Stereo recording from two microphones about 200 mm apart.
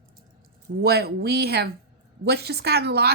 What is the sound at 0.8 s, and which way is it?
Speech, 55° right (ahead or behind).